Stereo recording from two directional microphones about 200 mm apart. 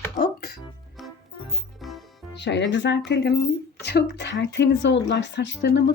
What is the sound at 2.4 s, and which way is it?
Speech, 60° left (ahead or behind).